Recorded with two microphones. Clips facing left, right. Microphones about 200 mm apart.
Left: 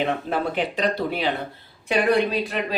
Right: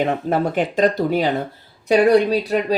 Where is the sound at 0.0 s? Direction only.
45° right (ahead or behind).